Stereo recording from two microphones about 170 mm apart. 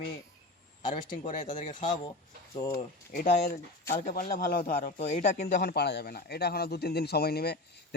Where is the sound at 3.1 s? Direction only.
60° left (ahead or behind).